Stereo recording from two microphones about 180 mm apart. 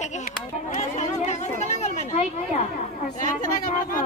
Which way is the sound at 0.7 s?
40° left (ahead or behind).